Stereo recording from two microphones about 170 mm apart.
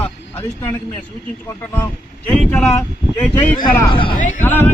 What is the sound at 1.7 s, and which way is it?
A man's voice, 10° left (ahead or behind).